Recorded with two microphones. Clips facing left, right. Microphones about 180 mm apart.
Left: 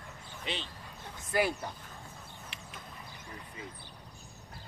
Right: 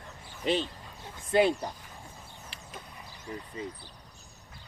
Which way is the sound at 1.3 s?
25° right (ahead or behind).